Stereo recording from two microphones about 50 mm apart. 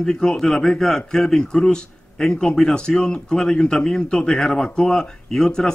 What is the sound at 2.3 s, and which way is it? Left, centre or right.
A man's voice, left.